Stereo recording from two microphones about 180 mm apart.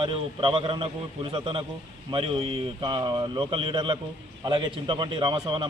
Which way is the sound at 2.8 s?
25° right (ahead or behind).